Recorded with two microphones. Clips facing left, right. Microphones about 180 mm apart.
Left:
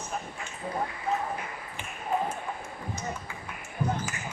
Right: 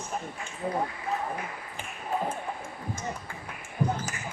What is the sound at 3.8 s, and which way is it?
Ping, 35° right (ahead or behind).